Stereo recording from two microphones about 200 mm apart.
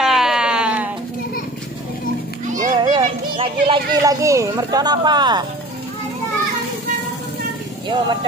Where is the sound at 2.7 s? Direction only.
20° right (ahead or behind).